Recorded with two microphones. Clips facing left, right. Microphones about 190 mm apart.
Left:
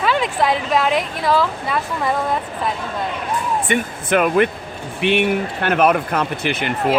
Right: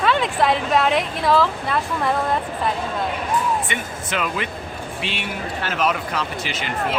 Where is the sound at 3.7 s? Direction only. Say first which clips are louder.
Left 9 dB; 55° left (ahead or behind).